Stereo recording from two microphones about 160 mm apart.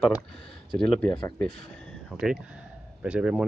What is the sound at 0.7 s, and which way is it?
Speech, 10° left (ahead or behind).